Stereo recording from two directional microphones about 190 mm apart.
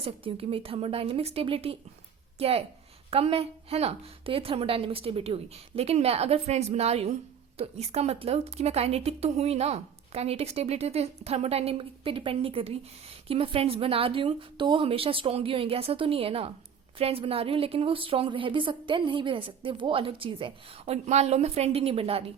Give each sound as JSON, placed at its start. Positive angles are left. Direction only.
{"t": 0.0, "sound": "a woman's voice", "side_deg": -30}